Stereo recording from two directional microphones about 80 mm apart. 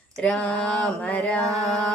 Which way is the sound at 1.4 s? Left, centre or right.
Right.